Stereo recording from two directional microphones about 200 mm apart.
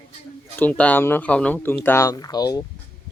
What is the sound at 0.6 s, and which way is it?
Speech, 5° left (ahead or behind).